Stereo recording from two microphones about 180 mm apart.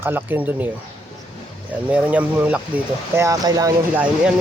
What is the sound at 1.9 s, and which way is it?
Speech, 10° right (ahead or behind).